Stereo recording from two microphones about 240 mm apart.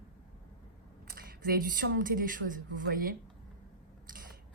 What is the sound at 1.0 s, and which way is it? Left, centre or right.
Speech, right.